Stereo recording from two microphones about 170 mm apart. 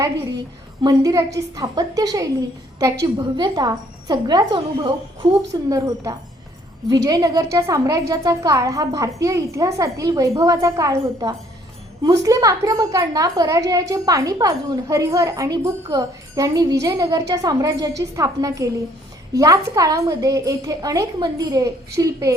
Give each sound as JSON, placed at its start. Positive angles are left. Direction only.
{"t": 0.8, "sound": "a woman's voice", "side_deg": -20}